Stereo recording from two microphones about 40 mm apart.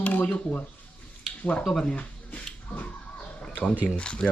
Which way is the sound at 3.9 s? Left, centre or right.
Left.